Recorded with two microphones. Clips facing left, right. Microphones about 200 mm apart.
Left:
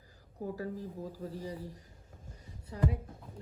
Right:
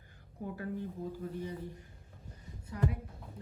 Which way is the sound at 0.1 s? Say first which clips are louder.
Left 3 dB; 35° left (ahead or behind).